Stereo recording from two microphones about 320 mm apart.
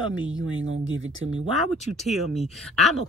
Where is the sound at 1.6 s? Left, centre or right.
Centre.